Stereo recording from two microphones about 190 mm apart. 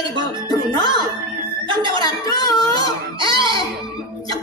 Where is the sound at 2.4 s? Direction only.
20° left (ahead or behind).